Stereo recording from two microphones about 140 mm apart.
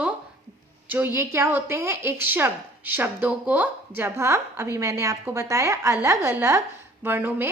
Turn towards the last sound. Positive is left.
turn(degrees=-15)  # may be behind; listen again after turning